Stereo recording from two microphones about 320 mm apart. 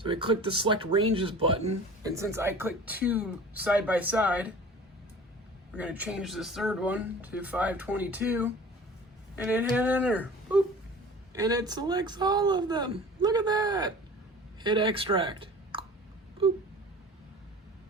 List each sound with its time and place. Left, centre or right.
0.0 s speech: centre
5.7 s speech: centre